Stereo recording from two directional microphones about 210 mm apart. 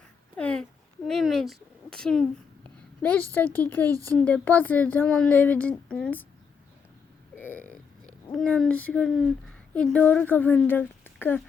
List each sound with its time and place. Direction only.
0.3 s a sound: 5° left (ahead or behind)
1.0 s speech: centre (ahead or behind)
3.9 s speech: 15° right (ahead or behind)
4.2 s speech: 5° left (ahead or behind)
7.3 s speech: 10° left (ahead or behind)